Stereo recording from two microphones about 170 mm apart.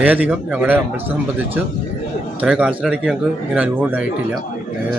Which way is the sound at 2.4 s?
5° right (ahead or behind).